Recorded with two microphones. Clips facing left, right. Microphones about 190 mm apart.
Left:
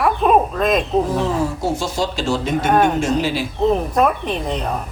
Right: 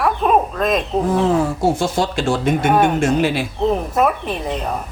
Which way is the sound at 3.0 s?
55° right (ahead or behind).